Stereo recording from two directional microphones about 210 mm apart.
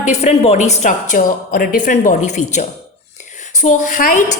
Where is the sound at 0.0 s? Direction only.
30° left (ahead or behind).